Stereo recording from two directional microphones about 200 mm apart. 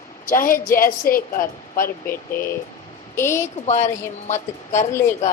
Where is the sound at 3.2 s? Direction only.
15° left (ahead or behind).